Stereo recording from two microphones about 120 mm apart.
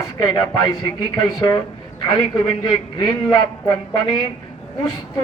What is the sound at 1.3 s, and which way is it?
Speech, 35° left (ahead or behind).